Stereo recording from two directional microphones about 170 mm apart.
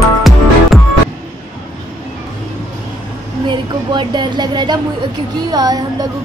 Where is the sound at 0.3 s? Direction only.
Centre (ahead or behind).